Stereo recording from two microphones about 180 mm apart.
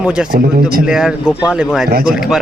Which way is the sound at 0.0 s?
5° right (ahead or behind).